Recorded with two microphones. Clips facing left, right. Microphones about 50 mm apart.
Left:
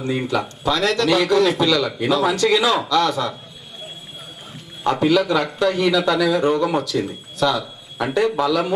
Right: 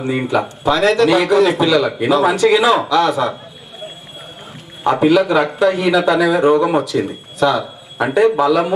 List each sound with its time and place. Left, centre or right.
0.0 s a man's voice: centre
4.8 s a man's voice: right